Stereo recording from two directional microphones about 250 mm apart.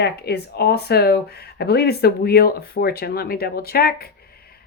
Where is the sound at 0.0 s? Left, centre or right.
Left.